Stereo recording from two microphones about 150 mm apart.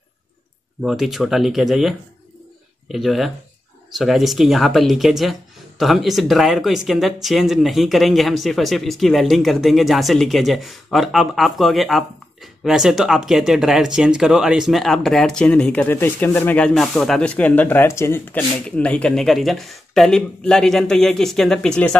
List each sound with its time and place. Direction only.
0.8 s speech: centre (ahead or behind)